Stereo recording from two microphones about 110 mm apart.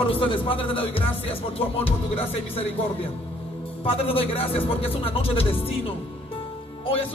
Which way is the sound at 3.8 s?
60° left (ahead or behind).